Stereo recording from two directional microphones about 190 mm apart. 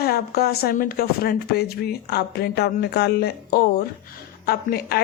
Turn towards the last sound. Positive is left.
turn(degrees=55)  # may be behind; listen again after turning